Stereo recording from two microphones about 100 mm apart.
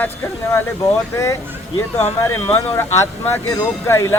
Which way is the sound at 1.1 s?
30° left (ahead or behind).